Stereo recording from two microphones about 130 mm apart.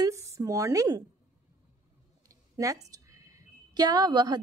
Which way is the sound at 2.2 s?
25° right (ahead or behind).